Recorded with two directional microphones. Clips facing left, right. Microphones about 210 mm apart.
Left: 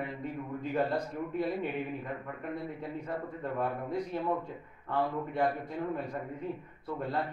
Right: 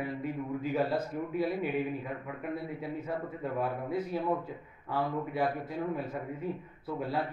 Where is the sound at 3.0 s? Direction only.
5° right (ahead or behind).